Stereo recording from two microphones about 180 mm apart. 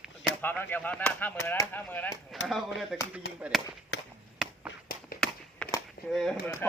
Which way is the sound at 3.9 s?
75° left (ahead or behind).